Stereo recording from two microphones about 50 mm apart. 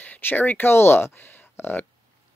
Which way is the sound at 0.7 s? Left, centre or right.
Left.